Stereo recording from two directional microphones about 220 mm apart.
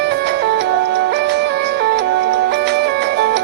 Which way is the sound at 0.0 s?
50° right (ahead or behind).